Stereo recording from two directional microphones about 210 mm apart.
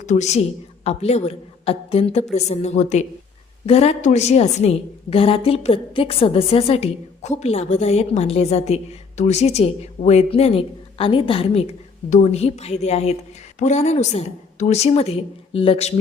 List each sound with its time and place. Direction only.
0.0 s a woman's voice: 35° left (ahead or behind)